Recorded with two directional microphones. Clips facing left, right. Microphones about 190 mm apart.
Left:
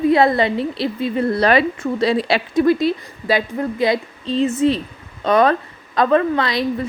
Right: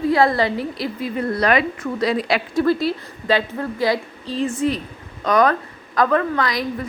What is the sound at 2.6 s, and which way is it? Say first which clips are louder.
A woman's voice: left 3 dB; 15° left (ahead or behind).